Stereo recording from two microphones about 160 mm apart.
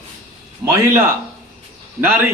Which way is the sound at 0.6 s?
15° right (ahead or behind).